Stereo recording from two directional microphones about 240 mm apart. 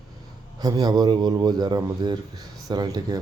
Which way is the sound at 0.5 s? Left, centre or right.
Centre.